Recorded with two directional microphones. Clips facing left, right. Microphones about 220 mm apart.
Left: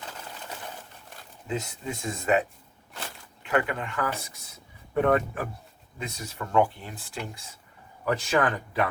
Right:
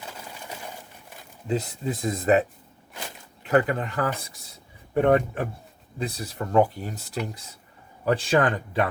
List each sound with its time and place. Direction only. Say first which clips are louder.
0.0 s pigeon: right 1 dB; 10° right (ahead or behind)
1.5 s speech: right 5 dB; 35° right (ahead or behind)
2.9 s walk: right 1 dB; 15° right (ahead or behind)
3.4 s speech: right 5 dB; 35° right (ahead or behind)
4.9 s speech: right 3 dB; 25° right (ahead or behind); by 7.2 s 40° right (ahead or behind)
8.0 s speech: right 3 dB; 30° right (ahead or behind)